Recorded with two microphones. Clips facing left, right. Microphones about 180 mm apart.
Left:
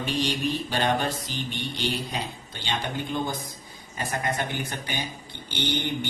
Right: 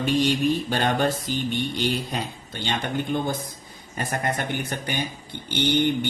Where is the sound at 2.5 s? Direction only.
55° right (ahead or behind).